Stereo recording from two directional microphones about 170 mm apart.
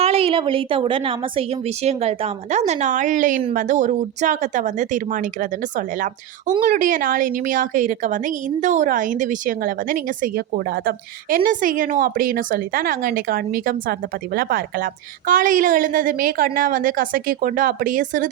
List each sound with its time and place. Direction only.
0.0 s a woman's voice: 35° right (ahead or behind); by 18.3 s 50° right (ahead or behind)